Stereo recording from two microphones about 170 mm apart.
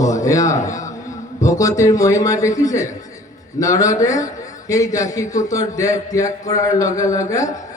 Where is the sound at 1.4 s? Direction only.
20° left (ahead or behind).